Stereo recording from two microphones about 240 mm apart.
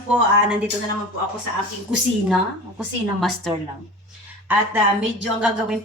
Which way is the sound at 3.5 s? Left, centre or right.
Centre.